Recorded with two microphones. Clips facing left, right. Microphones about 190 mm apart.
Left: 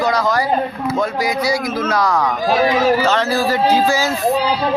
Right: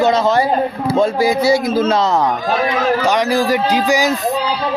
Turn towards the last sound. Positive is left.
turn(degrees=-15)  # may be behind; listen again after turning